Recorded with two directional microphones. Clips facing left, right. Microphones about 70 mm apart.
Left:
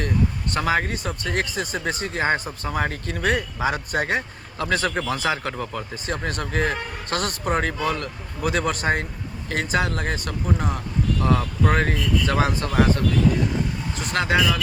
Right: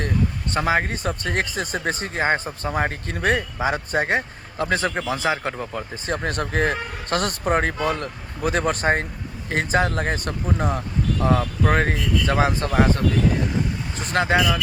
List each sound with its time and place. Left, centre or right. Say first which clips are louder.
0.5 s a man's voice: right 2 dB; right
2.9 s speech: right 1 dB; right
6.2 s a man's voice: right 2 dB; right
10.8 s speech: right 1 dB; right
11.7 s a man's voice: right 1 dB; right
12.3 s speech: right 4 dB; right